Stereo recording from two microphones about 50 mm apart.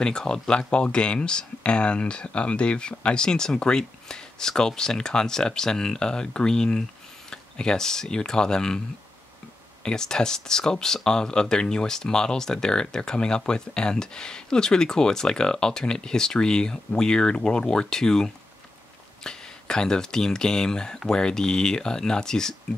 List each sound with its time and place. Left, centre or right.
0.0 s speech: centre
9.8 s speech: centre